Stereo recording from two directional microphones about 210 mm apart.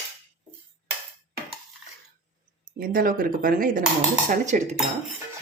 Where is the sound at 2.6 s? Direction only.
45° right (ahead or behind).